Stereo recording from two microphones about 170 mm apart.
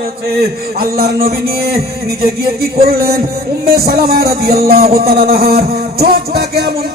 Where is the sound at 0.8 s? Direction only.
65° right (ahead or behind).